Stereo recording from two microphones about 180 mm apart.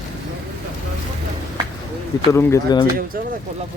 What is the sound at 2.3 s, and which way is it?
Speech, 15° left (ahead or behind).